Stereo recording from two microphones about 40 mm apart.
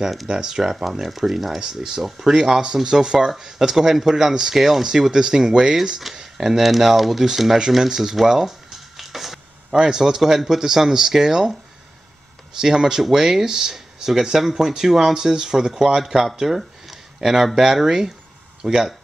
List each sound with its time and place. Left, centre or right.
0.3 s speech: centre
8.9 s a sound: centre
9.7 s speech: centre
12.5 s speech: centre